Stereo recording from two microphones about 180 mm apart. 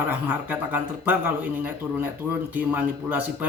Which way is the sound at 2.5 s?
10° right (ahead or behind).